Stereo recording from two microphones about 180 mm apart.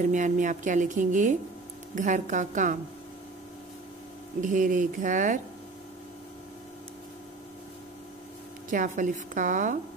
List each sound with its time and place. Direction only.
0.1 s speech: 45° right (ahead or behind)
4.4 s speech: 45° right (ahead or behind)
8.6 s speech: 45° right (ahead or behind)